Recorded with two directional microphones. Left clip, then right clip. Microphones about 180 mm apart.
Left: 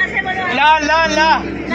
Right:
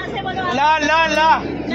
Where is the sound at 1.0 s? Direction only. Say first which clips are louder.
Left 2 dB; 25° right (ahead or behind).